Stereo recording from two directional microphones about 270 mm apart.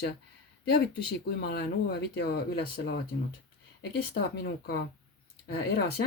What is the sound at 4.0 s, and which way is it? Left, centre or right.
Speech, left.